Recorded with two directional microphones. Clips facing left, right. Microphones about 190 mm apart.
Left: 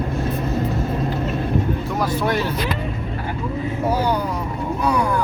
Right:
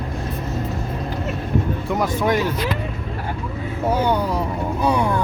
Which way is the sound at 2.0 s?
15° right (ahead or behind).